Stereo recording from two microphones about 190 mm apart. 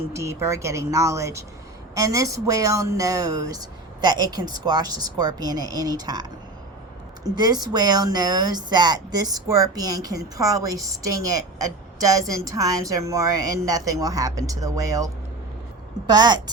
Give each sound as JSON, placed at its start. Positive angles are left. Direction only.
{"t": 0.1, "sound": "speech", "side_deg": -15}
{"t": 7.3, "sound": "speech", "side_deg": -20}